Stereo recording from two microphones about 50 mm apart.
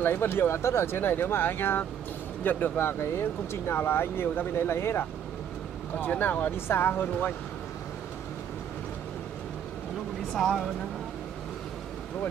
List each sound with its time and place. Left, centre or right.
0.0 s speech: left
0.6 s speech: left
2.8 s speech: left
5.9 s speech: left
6.5 s speech: left
10.3 s speech: centre